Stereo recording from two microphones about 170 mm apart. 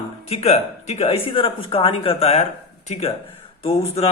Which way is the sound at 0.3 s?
40° left (ahead or behind).